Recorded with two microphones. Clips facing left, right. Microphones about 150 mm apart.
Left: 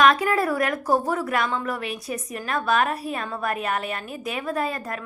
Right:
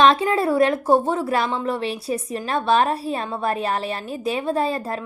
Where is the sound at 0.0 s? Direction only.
25° right (ahead or behind).